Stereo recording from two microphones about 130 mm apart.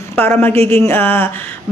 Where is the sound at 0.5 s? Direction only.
50° right (ahead or behind).